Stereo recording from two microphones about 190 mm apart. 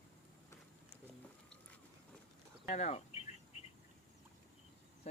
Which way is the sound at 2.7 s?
35° left (ahead or behind).